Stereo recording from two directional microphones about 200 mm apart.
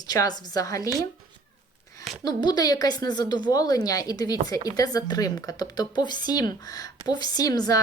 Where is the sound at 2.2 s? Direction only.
20° left (ahead or behind).